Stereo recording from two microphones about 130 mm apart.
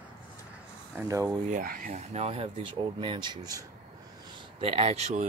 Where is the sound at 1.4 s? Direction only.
85° right.